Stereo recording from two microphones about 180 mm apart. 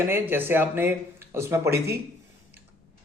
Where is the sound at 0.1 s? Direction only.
10° right (ahead or behind).